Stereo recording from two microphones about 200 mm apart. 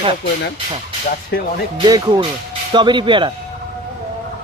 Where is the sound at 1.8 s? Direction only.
20° right (ahead or behind).